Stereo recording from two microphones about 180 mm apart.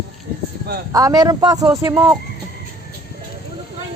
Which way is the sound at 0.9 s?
20° right (ahead or behind).